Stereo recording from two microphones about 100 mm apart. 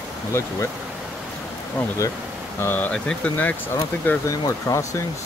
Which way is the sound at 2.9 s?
10° left (ahead or behind).